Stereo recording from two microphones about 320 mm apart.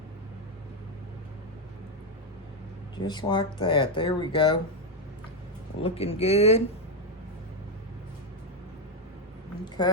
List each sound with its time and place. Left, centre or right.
3.1 s speech: centre
5.8 s speech: centre
9.8 s speech: centre